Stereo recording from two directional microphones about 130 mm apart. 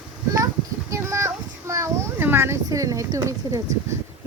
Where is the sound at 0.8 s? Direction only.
25° right (ahead or behind).